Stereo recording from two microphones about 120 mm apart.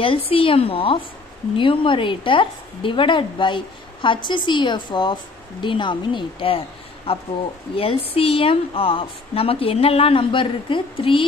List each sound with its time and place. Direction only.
0.0 s a woman's voice: 50° left (ahead or behind)
7.7 s a woman's voice: 50° left (ahead or behind)